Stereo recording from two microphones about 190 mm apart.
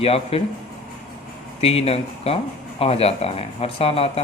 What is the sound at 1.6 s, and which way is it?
Speech, 30° left (ahead or behind).